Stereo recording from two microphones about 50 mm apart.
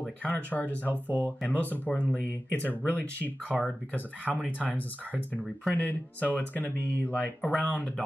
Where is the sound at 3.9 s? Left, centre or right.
Left.